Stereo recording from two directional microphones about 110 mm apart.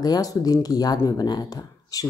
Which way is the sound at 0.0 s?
35° left (ahead or behind).